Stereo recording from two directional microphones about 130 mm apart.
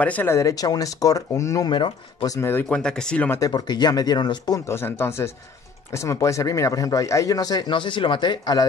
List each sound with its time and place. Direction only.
0.0 s speech: 15° left (ahead or behind)
1.7 s speech: 35° left (ahead or behind)
2.3 s speech: 20° left (ahead or behind)
2.7 s speech: 5° left (ahead or behind)
3.3 s speech: 25° left (ahead or behind)
4.6 s speech: 20° left (ahead or behind); by 8.6 s 35° left (ahead or behind)